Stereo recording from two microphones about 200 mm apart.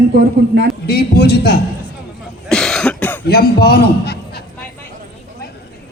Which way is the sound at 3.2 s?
50° left (ahead or behind).